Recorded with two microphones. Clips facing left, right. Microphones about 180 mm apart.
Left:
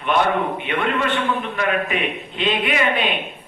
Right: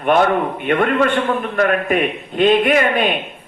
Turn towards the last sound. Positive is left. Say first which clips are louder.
# right 5 dB
turn(degrees=-50)  # may be behind; listen again after turning